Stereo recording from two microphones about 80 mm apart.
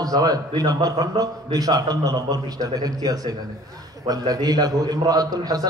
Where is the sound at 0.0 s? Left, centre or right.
Right.